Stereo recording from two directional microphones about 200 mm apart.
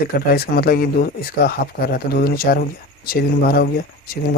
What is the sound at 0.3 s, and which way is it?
Speech, 50° left (ahead or behind).